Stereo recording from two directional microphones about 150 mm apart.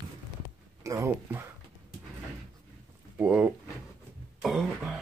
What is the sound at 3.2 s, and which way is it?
Speech, 10° right (ahead or behind).